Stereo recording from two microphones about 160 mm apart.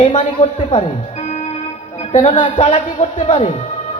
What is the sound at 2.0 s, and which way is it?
Music, 45° left (ahead or behind).